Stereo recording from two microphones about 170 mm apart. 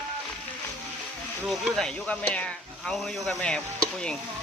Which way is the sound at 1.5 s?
Centre (ahead or behind).